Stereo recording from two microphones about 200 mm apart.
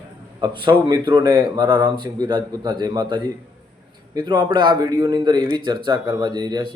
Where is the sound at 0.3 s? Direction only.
25° right (ahead or behind).